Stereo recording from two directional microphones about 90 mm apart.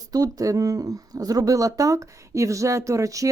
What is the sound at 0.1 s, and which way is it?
Speech, 40° right (ahead or behind).